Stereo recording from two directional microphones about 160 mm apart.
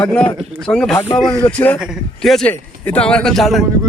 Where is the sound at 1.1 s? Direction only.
30° left (ahead or behind).